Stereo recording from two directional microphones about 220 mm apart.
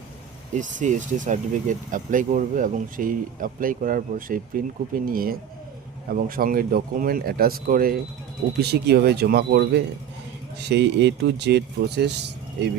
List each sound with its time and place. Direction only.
0.6 s speech: 35° right (ahead or behind)